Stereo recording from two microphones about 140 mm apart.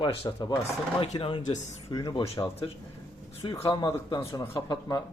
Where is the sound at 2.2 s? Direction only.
45° left (ahead or behind).